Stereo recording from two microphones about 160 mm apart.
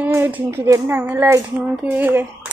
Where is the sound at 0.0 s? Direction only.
10° right (ahead or behind).